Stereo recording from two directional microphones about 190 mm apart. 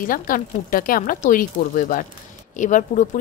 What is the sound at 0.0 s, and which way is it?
A woman's voice, 45° left (ahead or behind).